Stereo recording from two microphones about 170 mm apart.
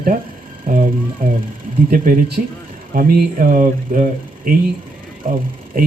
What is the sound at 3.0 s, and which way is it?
Speech, 55° right (ahead or behind).